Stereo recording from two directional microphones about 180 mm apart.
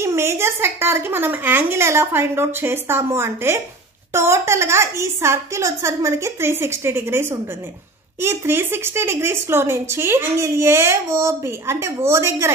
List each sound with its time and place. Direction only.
0.0 s speech: 15° right (ahead or behind)